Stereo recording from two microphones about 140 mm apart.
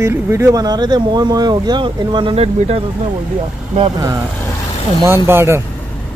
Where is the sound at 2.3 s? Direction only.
50° right (ahead or behind).